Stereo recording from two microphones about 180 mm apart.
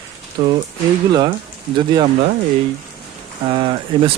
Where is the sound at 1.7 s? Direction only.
25° right (ahead or behind).